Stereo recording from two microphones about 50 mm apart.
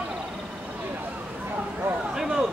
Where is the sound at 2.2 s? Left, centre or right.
Centre.